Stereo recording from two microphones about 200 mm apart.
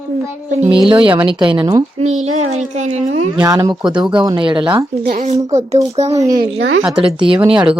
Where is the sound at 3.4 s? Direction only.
15° right (ahead or behind).